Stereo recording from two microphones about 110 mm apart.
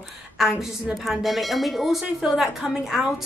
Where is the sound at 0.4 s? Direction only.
5° right (ahead or behind).